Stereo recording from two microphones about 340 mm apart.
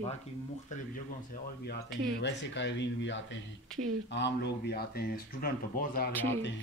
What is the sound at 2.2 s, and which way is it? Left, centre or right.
Speech, left.